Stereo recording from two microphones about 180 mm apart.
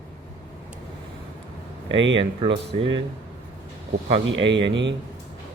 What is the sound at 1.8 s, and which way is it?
Speech, 90° right.